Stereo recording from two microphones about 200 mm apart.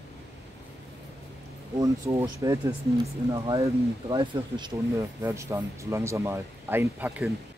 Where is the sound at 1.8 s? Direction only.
15° right (ahead or behind).